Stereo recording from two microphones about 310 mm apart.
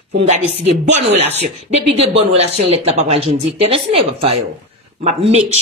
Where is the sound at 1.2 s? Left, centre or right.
Right.